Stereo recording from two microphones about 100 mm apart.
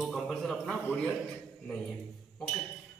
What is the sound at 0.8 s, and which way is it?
Speech, 20° left (ahead or behind).